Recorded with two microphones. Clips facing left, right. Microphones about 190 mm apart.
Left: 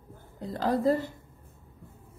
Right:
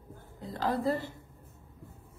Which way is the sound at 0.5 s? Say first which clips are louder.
Left 5 dB; 40° left (ahead or behind).